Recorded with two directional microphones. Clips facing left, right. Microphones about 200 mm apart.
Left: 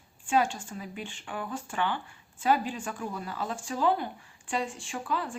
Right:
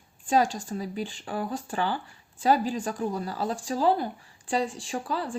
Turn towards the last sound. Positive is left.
turn(degrees=-35)  # may be behind; listen again after turning